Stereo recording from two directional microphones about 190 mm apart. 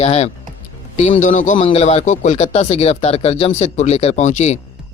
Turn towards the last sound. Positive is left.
turn(degrees=40)  # may be behind; listen again after turning